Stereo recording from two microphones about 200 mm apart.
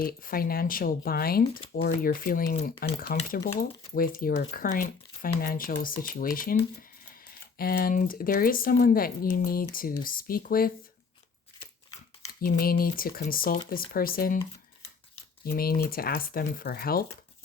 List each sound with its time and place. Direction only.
0.0 s speech: 45° left (ahead or behind)
7.6 s speech: 50° left (ahead or behind)
12.3 s speech: 50° left (ahead or behind)
15.4 s speech: 50° left (ahead or behind)